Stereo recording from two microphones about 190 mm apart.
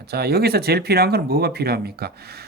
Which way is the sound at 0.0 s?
55° right (ahead or behind).